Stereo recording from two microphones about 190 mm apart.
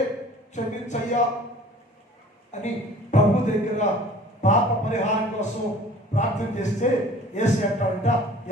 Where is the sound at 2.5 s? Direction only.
40° left (ahead or behind).